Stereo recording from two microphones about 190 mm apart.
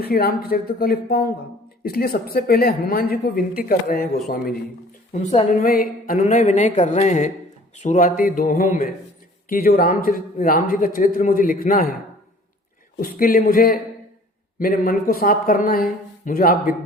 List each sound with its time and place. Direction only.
0.0 s a man's voice: 55° left (ahead or behind)
5.1 s speech: 35° left (ahead or behind)
5.6 s a man's voice: 50° left (ahead or behind)
13.0 s a man's voice: 50° left (ahead or behind)